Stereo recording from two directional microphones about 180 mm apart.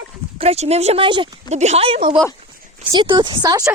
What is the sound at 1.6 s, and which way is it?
Speech, 35° right (ahead or behind).